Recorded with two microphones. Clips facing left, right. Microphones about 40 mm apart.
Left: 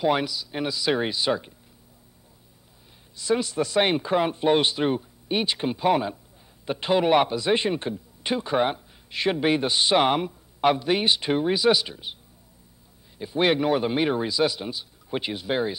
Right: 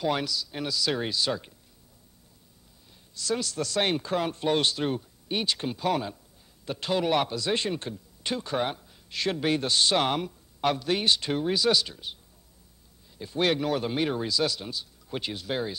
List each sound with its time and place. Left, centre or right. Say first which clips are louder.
0.0 s a man's voice: left 5 dB; centre
3.2 s a man's voice: left 6 dB; left
13.2 s a man's voice: left 4 dB; centre